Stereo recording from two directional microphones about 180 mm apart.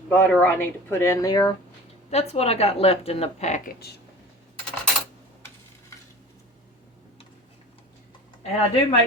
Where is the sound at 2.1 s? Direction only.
35° left (ahead or behind).